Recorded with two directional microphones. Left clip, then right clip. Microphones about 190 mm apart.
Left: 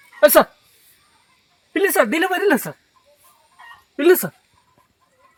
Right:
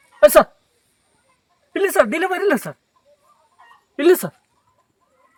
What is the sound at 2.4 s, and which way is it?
Speech, 10° right (ahead or behind).